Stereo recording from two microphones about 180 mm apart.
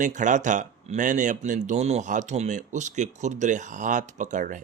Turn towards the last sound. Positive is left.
turn(degrees=-45)  # may be behind; listen again after turning